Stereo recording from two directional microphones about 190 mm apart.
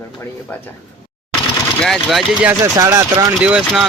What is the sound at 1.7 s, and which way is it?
Speech, centre (ahead or behind).